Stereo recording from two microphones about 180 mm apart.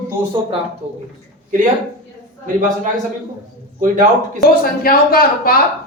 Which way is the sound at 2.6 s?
45° right (ahead or behind).